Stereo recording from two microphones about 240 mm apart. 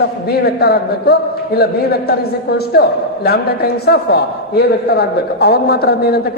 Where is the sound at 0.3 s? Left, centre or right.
Left.